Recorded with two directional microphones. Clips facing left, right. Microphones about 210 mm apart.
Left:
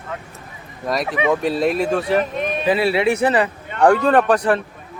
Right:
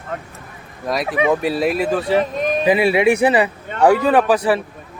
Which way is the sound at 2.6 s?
15° right (ahead or behind).